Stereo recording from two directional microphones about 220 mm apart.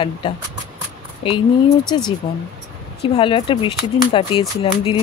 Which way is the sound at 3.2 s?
25° left (ahead or behind).